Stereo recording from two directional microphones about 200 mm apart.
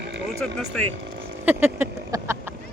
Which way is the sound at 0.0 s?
60° right (ahead or behind).